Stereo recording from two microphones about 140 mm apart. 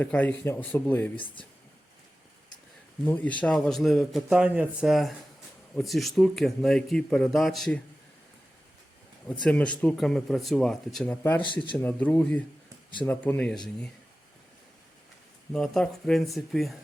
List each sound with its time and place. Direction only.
0.0 s speech: 10° left (ahead or behind)
3.1 s a man's voice: 10° left (ahead or behind)
9.4 s a man's voice: 10° left (ahead or behind)
15.5 s a man's voice: 5° left (ahead or behind)